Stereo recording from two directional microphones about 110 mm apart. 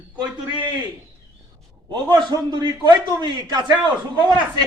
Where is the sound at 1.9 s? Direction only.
40° right (ahead or behind).